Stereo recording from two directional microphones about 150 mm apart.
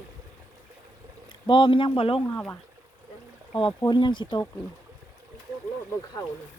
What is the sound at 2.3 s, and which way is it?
Speech, 15° left (ahead or behind).